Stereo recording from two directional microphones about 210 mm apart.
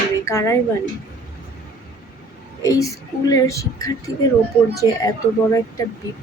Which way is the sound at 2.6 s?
15° left (ahead or behind).